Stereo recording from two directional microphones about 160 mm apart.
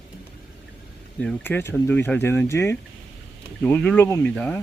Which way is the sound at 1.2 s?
10° left (ahead or behind).